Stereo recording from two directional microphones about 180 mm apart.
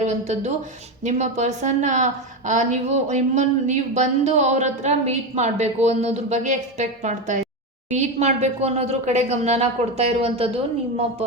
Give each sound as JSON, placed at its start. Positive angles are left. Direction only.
{"t": 0.0, "sound": "speech", "side_deg": -40}